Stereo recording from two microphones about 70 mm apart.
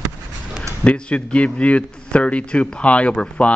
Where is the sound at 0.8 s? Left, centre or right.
Centre.